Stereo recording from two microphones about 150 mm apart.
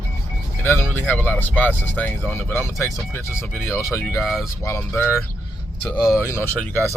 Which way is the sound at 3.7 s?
20° left (ahead or behind).